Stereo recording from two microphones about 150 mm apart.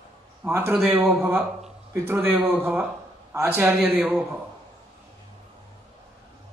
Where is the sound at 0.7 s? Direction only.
Centre (ahead or behind).